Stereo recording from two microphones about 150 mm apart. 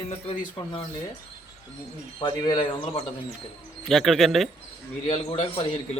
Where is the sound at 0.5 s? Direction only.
25° left (ahead or behind).